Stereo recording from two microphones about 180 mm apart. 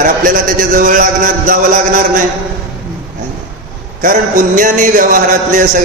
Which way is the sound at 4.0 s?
50° right (ahead or behind).